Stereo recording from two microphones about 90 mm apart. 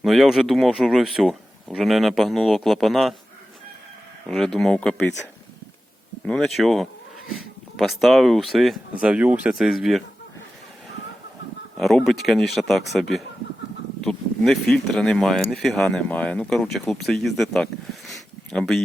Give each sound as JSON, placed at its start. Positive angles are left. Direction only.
{"t": 0.0, "sound": "speech", "side_deg": 0}
{"t": 4.3, "sound": "speech", "side_deg": 5}
{"t": 6.2, "sound": "speech", "side_deg": 5}
{"t": 9.0, "sound": "speech", "side_deg": -15}
{"t": 9.6, "sound": "speech", "side_deg": -5}
{"t": 11.8, "sound": "speech", "side_deg": 0}
{"t": 16.0, "sound": "speech", "side_deg": 15}
{"t": 18.1, "sound": "a sound", "side_deg": 0}